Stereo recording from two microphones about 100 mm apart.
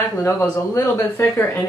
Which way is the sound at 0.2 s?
30° left (ahead or behind).